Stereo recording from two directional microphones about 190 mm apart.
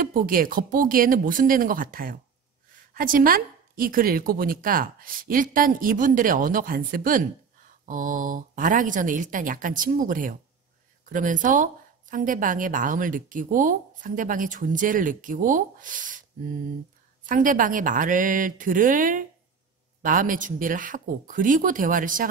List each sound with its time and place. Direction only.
0.0 s a woman's voice: 50° right (ahead or behind)
17.3 s a woman's voice: 45° right (ahead or behind)